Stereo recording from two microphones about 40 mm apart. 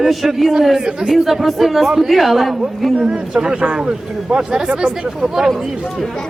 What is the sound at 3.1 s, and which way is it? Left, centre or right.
Speech, centre.